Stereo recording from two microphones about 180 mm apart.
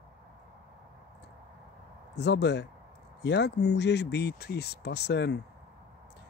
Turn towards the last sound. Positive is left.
turn(degrees=70)  # may be behind; listen again after turning